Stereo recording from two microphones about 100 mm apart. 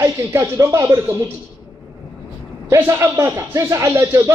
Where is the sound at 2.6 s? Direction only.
30° right (ahead or behind).